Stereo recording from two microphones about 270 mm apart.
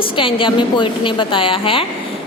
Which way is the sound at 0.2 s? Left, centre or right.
Centre.